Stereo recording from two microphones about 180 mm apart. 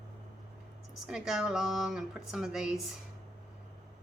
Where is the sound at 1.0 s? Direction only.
5° right (ahead or behind).